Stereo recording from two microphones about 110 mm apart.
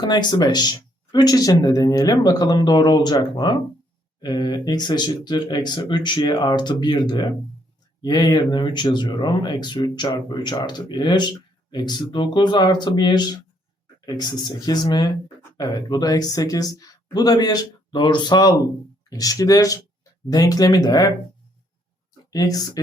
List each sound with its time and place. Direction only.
0.0 s speech: 40° left (ahead or behind)
22.3 s speech: 35° left (ahead or behind)